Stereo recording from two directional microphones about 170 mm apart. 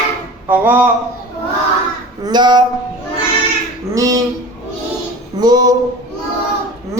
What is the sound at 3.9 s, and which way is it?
Speech, 20° right (ahead or behind).